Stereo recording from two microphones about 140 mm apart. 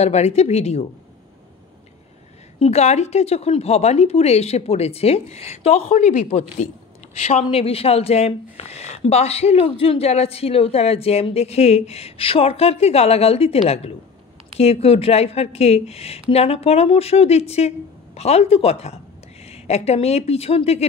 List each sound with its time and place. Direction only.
0.0 s speech: 50° left (ahead or behind)
2.6 s speech: 50° left (ahead or behind)